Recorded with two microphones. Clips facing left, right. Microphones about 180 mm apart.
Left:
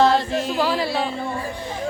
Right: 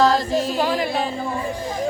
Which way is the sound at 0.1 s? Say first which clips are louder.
Right 1 dB; 40° right (ahead or behind).